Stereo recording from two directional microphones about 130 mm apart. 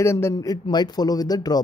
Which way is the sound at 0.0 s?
20° left (ahead or behind).